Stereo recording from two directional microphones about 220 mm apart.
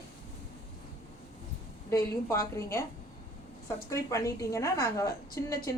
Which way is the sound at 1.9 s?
15° left (ahead or behind).